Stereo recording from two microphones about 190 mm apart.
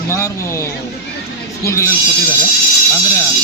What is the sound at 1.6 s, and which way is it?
Speech, 15° left (ahead or behind).